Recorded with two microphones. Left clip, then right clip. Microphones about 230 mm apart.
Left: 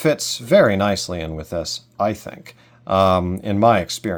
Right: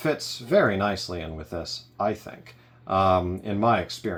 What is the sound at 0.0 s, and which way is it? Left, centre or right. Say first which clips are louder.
Speech: left 8 dB; left.